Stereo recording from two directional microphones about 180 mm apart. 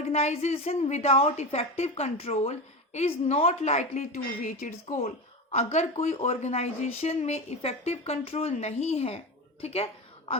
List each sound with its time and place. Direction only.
0.0 s speech: 35° left (ahead or behind)